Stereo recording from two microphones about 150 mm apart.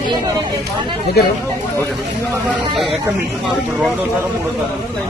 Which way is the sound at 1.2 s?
90° left.